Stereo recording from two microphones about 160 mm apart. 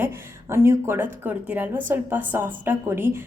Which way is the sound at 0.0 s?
15° right (ahead or behind).